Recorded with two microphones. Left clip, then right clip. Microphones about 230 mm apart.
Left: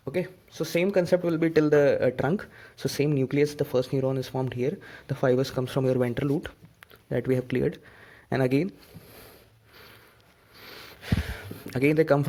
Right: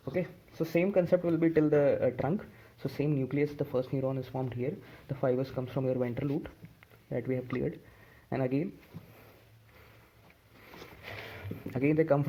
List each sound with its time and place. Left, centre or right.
0.0 s speech: left
0.9 s speech: left
11.3 s a sound: left